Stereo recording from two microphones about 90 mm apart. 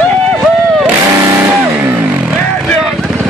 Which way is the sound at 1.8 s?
25° right (ahead or behind).